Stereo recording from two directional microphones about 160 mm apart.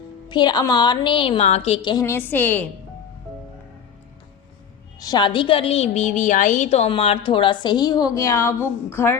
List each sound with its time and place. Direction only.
0.3 s a woman's voice: 30° left (ahead or behind)
2.0 s a woman's voice: 10° left (ahead or behind)
4.9 s a woman's voice: 25° left (ahead or behind)